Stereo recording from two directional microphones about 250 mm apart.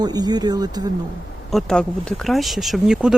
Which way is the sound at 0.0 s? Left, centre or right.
Centre.